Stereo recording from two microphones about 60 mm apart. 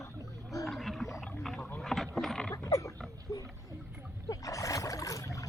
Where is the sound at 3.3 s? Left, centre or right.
Left.